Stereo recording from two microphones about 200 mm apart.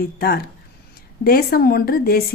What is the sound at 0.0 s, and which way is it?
Speech, 50° left (ahead or behind).